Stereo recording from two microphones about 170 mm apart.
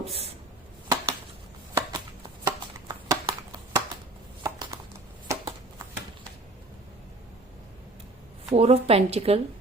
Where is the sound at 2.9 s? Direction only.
25° right (ahead or behind).